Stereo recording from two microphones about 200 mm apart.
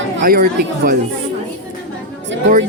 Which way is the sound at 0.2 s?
45° right (ahead or behind).